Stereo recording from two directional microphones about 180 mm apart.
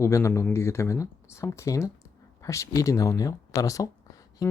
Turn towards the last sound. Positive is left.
turn(degrees=20)  # may be behind; listen again after turning